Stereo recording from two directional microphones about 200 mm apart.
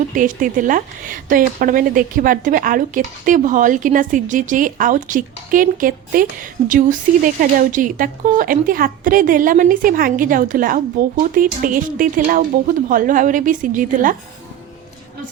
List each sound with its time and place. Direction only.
0.2 s speech: 40° right (ahead or behind)